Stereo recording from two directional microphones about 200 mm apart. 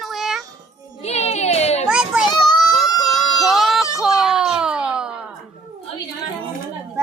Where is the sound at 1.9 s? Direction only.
5° right (ahead or behind).